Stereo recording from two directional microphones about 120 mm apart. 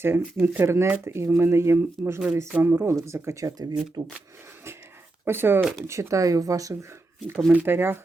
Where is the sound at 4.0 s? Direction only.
40° right (ahead or behind).